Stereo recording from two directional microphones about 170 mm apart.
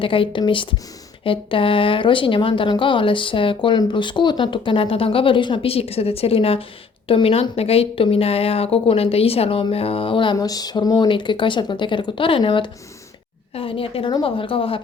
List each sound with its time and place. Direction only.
0.0 s a woman's voice: 30° left (ahead or behind)